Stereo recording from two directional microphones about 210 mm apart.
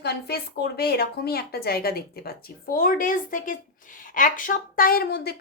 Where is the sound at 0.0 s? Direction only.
50° left (ahead or behind).